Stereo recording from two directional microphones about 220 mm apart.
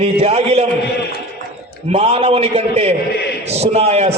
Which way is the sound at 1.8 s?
25° right (ahead or behind).